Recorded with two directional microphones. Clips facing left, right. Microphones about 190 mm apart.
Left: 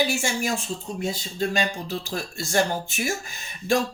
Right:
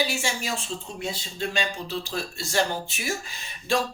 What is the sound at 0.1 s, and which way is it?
Speech, 45° left (ahead or behind).